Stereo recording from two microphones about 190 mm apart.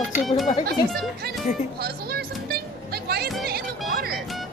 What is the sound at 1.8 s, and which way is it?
Music, 55° right (ahead or behind).